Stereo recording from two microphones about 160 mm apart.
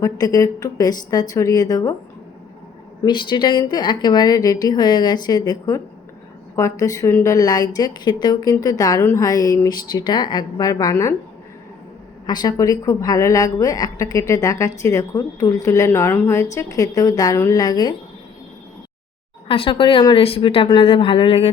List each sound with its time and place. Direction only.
0.0 s a woman's voice: 20° left (ahead or behind)
3.0 s a woman's voice: 30° left (ahead or behind)
12.2 s a woman's voice: 25° left (ahead or behind)
19.5 s a woman's voice: 35° left (ahead or behind)